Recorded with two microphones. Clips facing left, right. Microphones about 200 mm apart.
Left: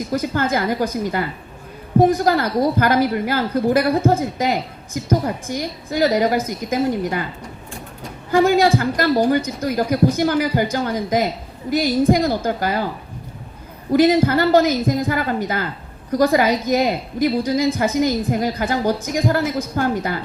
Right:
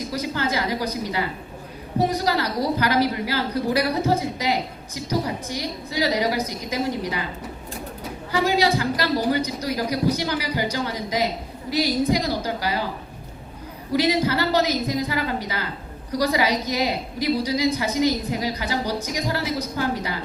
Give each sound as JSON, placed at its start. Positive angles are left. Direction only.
{"t": 0.1, "sound": "a woman's voice", "side_deg": 50}
{"t": 8.3, "sound": "a woman's voice", "side_deg": 50}
{"t": 13.9, "sound": "a woman's voice", "side_deg": 50}